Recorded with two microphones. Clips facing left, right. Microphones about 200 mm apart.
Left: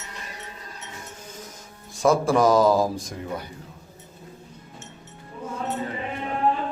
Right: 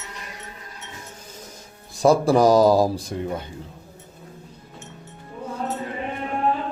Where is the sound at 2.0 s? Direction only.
35° right (ahead or behind).